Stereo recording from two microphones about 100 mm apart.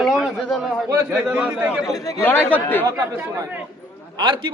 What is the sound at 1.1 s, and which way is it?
Speech, 15° right (ahead or behind).